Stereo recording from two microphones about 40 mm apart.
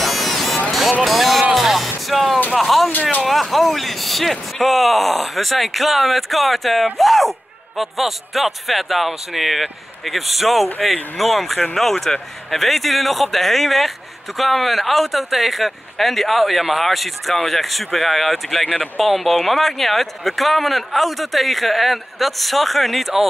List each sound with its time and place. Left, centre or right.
0.0 s music: centre
1.0 s a man's voice: centre
1.5 s music: centre
2.5 s a man's voice: centre
3.0 s speech: left
3.3 s a man's voice: centre